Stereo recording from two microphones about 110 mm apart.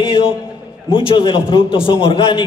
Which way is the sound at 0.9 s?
55° left (ahead or behind).